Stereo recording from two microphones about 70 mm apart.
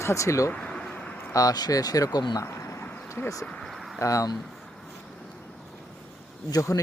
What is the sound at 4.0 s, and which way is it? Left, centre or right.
Speech, left.